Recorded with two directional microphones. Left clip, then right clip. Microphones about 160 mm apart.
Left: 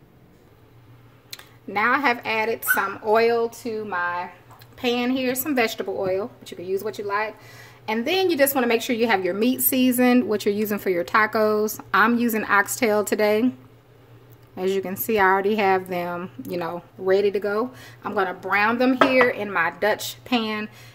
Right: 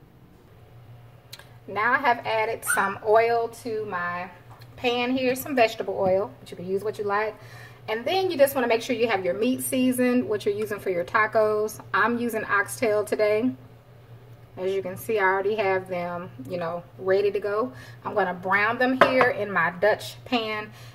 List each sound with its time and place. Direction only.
1.3 s a woman's voice: 55° left (ahead or behind)
14.6 s a woman's voice: 65° left (ahead or behind)